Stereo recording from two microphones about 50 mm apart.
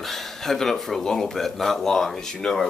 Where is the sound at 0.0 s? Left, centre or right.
Centre.